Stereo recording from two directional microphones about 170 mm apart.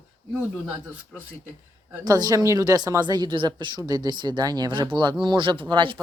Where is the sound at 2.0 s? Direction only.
20° right (ahead or behind).